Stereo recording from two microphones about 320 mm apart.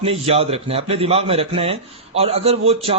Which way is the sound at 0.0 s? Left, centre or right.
Centre.